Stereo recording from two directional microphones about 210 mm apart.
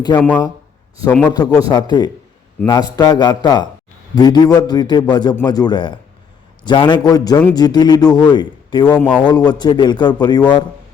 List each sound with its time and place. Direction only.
0.2 s speech: 5° left (ahead or behind)
1.3 s a man's voice: 20° left (ahead or behind)